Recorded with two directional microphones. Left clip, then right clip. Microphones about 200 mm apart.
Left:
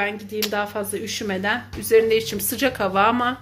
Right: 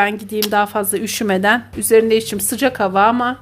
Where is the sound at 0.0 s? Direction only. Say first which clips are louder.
Right 7 dB; 45° right (ahead or behind).